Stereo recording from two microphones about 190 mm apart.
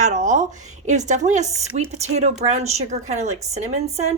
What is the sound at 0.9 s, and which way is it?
A woman's voice, 40° right (ahead or behind).